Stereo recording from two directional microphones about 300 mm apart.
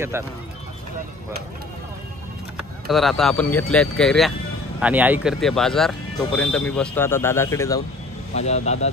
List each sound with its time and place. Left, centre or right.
0.1 s speech: centre
2.9 s speech: centre
8.4 s speech: left